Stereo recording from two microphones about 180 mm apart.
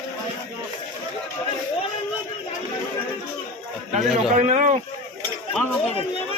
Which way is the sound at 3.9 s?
40° right (ahead or behind).